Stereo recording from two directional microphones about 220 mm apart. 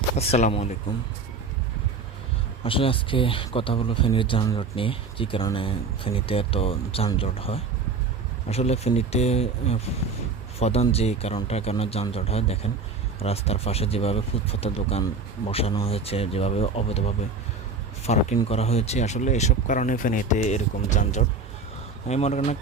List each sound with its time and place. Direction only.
0.2 s speech: 30° left (ahead or behind)
2.6 s speech: 25° left (ahead or behind)
18.0 s speech: 30° left (ahead or behind)